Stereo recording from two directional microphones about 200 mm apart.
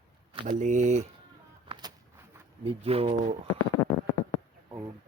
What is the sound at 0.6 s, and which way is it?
Speech, 35° right (ahead or behind).